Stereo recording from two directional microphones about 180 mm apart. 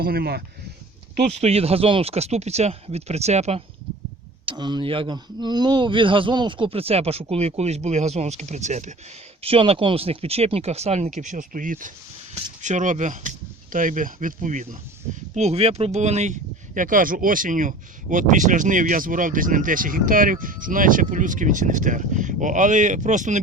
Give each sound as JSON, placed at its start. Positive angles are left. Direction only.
{"t": 0.0, "sound": "speech", "side_deg": -55}
{"t": 1.4, "sound": "speech", "side_deg": -35}
{"t": 4.4, "sound": "speech", "side_deg": -25}